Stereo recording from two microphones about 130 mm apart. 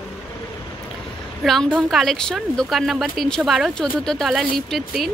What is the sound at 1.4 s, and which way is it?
A woman's voice, centre (ahead or behind).